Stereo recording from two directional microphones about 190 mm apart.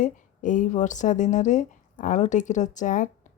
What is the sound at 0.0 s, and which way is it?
Speech, 40° left (ahead or behind).